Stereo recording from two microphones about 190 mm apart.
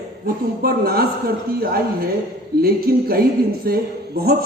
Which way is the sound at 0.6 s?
50° right (ahead or behind).